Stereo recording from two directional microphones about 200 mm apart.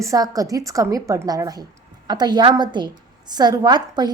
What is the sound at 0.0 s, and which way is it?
A woman's voice, 15° right (ahead or behind).